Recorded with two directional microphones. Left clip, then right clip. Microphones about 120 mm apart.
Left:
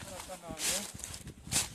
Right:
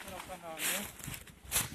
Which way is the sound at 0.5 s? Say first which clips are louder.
Left 1 dB; 25° left (ahead or behind).